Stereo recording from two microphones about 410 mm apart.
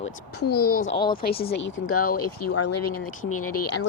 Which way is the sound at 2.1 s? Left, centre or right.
Left.